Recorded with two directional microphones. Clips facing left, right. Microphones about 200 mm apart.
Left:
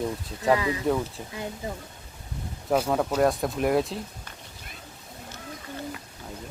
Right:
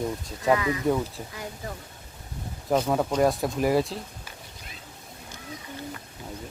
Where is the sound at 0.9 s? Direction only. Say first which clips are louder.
Right 1 dB; 5° right (ahead or behind).